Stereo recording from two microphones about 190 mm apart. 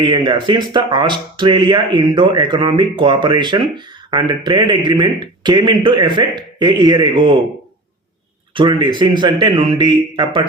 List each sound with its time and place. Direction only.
0.0 s speech: 25° right (ahead or behind)
8.5 s speech: 25° right (ahead or behind)